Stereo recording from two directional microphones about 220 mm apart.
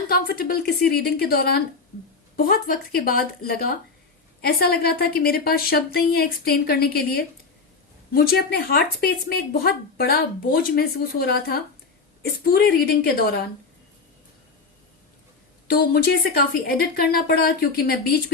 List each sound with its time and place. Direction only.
0.1 s speech: 40° left (ahead or behind)
15.6 s speech: 40° left (ahead or behind)